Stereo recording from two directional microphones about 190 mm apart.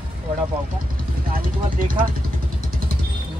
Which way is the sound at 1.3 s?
50° right (ahead or behind).